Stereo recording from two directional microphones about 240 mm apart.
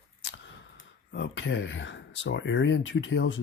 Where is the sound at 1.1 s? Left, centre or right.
Left.